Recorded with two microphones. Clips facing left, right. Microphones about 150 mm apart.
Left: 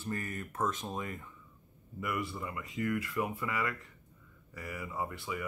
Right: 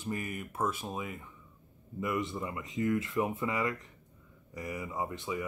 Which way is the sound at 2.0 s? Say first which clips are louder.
Right 3 dB; 20° right (ahead or behind).